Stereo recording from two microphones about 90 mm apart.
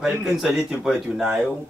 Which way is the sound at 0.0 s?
5° right (ahead or behind).